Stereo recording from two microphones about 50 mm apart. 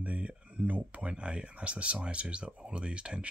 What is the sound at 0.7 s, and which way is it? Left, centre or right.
Speech, right.